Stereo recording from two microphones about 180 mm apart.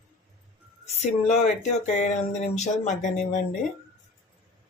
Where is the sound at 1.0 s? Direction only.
35° left (ahead or behind).